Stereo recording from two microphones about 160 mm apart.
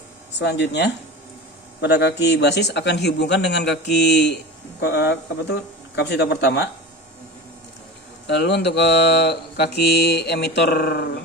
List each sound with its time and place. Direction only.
0.3 s mantra: 90° left
8.3 s mantra: 90° left